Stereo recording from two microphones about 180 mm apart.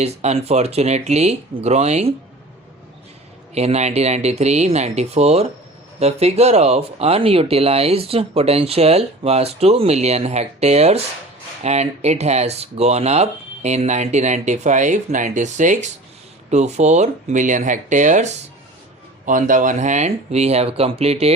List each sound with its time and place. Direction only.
0.0 s speech: 35° right (ahead or behind)
3.5 s speech: 35° right (ahead or behind)